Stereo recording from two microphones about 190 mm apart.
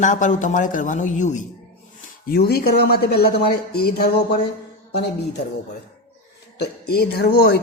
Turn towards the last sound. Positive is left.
turn(degrees=55)  # may be behind; listen again after turning